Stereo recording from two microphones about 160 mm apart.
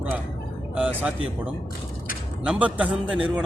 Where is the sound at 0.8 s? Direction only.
5° right (ahead or behind).